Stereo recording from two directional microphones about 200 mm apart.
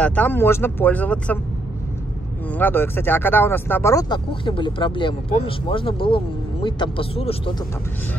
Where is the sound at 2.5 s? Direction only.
10° left (ahead or behind); by 7.6 s 30° left (ahead or behind).